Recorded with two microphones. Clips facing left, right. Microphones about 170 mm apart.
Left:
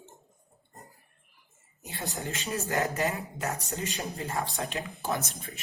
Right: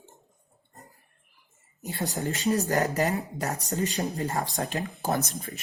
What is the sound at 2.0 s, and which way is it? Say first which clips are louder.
Speech: right 8 dB; 40° right (ahead or behind).